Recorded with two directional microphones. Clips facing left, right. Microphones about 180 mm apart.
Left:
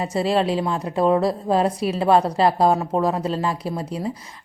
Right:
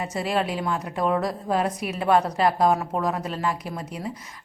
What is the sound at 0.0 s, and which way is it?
A woman's voice, 30° left (ahead or behind).